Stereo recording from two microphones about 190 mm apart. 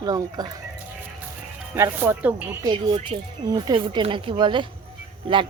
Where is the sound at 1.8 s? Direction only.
10° right (ahead or behind).